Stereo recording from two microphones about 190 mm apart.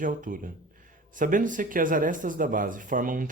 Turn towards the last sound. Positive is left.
turn(degrees=-45)  # may be behind; listen again after turning